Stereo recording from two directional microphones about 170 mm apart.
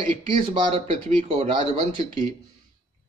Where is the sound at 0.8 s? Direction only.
45° right (ahead or behind).